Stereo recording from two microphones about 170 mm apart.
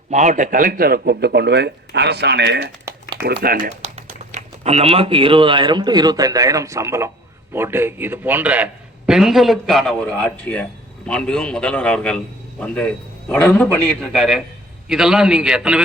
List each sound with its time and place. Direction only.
0.1 s speech: 45° right (ahead or behind); by 2.7 s 80° right
3.2 s speech: 65° right (ahead or behind)
3.8 s a man's voice: 40° right (ahead or behind); by 15.8 s 5° right (ahead or behind)